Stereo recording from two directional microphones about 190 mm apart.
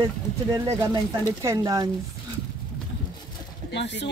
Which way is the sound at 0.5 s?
15° right (ahead or behind).